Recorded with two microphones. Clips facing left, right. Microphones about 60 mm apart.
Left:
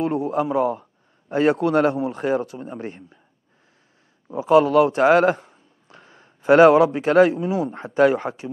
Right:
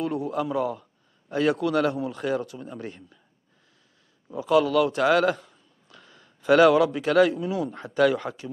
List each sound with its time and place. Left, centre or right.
0.0 s a man's voice: left
1.6 s speech: left
1.9 s a man's voice: left
4.3 s a man's voice: left